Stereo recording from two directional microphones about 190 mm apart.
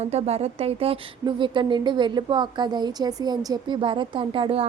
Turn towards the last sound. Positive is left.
turn(degrees=-30)  # may be behind; listen again after turning